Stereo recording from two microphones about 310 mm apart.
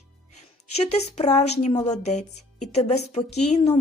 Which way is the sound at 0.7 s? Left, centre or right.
Centre.